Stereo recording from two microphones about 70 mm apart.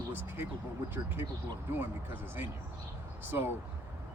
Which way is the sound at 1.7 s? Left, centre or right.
Right.